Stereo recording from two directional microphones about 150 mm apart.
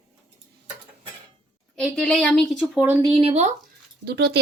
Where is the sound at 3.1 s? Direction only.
40° right (ahead or behind).